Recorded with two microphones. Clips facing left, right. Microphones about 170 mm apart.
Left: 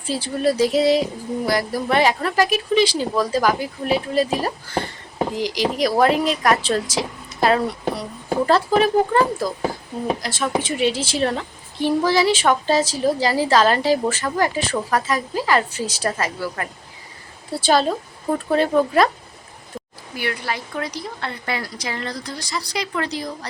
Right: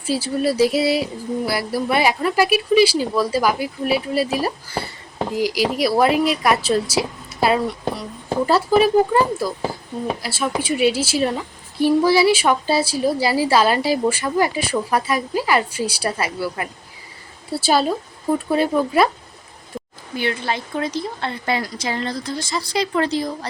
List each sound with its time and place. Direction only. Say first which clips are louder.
0.0 s a woman's voice: right 1 dB; 5° right (ahead or behind)
20.1 s a woman's voice: right 3 dB; 25° right (ahead or behind)